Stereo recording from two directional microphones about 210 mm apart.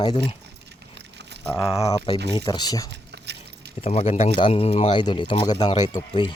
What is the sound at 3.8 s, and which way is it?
Speech, 25° left (ahead or behind).